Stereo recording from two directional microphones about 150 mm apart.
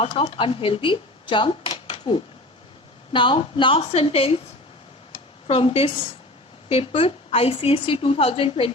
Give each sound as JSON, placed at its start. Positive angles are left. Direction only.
{"t": 0.0, "sound": "a woman's voice", "side_deg": 35}
{"t": 5.5, "sound": "a woman's voice", "side_deg": 40}